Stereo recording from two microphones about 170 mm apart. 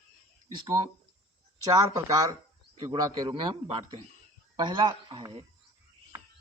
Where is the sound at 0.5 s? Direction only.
25° right (ahead or behind).